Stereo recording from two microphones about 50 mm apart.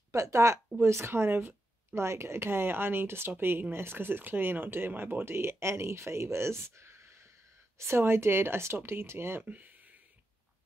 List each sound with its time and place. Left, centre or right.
0.1 s a woman's voice: right
2.0 s speech: right